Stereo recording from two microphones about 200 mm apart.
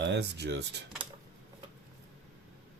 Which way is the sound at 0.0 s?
60° right (ahead or behind).